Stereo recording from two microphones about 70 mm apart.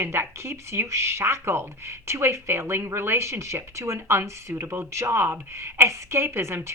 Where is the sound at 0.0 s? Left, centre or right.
Right.